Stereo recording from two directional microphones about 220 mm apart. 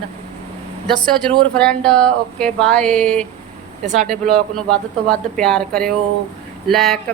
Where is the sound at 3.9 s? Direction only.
35° right (ahead or behind).